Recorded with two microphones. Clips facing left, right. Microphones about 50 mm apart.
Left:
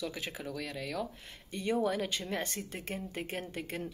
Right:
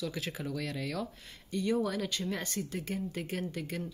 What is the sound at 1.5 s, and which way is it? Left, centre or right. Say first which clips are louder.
Speech: even; left.